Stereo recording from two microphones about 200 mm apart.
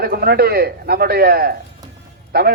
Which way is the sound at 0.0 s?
50° right (ahead or behind).